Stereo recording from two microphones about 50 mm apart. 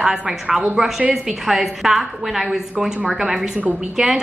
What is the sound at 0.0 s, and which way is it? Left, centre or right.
A woman's voice, centre.